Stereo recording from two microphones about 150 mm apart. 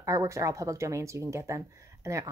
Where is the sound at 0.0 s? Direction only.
20° right (ahead or behind).